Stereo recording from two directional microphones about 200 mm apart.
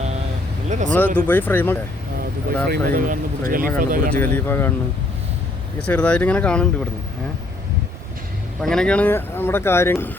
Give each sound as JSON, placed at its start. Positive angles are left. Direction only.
{"t": 0.7, "sound": "speech", "side_deg": -40}
{"t": 0.9, "sound": "speech", "side_deg": 10}
{"t": 2.6, "sound": "speech", "side_deg": -45}
{"t": 4.2, "sound": "speech", "side_deg": 10}
{"t": 5.8, "sound": "speech", "side_deg": 5}
{"t": 8.6, "sound": "speech", "side_deg": 5}